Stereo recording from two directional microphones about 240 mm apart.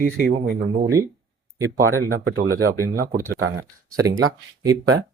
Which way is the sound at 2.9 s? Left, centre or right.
Right.